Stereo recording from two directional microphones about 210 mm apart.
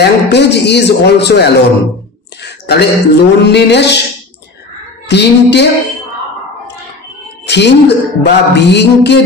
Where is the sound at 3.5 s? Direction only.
55° left (ahead or behind).